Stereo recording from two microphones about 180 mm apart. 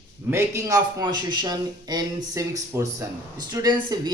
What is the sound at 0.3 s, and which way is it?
Speech, 15° right (ahead or behind).